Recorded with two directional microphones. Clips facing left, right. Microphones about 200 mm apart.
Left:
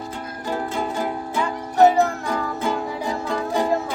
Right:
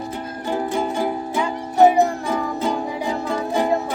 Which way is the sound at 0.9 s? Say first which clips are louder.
Right 3 dB; 15° right (ahead or behind).